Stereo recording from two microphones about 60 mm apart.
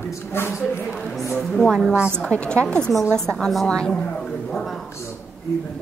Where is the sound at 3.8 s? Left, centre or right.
Centre.